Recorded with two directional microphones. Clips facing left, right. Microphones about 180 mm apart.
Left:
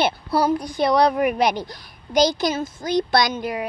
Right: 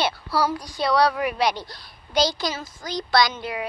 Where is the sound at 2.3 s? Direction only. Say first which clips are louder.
Left 6 dB; 20° left (ahead or behind).